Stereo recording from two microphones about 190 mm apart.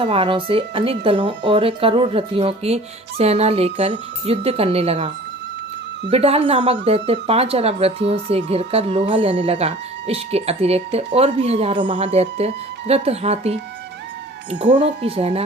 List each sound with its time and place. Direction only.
0.0 s speech: 30° right (ahead or behind)
14.6 s speech: 30° right (ahead or behind)